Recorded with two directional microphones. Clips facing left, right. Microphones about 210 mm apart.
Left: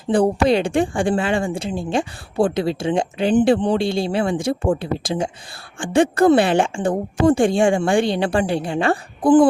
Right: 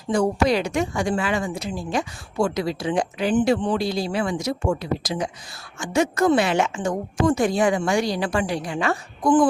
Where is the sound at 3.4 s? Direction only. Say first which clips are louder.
Left 4 dB; 35° left (ahead or behind).